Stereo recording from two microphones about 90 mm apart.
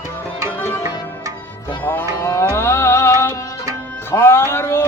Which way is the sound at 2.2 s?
30° left (ahead or behind).